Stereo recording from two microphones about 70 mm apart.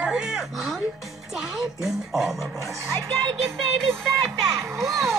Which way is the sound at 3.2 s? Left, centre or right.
Centre.